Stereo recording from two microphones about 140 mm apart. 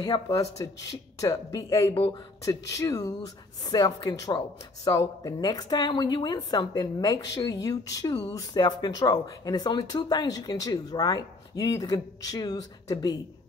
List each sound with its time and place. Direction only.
0.0 s speech: 25° left (ahead or behind)